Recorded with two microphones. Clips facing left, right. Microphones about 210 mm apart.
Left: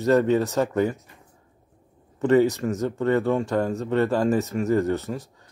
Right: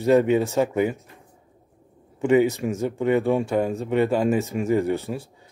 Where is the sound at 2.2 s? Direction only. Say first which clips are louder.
Even; 10° right (ahead or behind).